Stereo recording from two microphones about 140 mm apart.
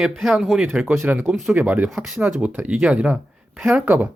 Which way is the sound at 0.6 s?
10° right (ahead or behind).